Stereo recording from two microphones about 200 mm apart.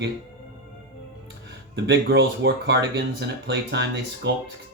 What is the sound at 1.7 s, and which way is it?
Speech, 60° right (ahead or behind).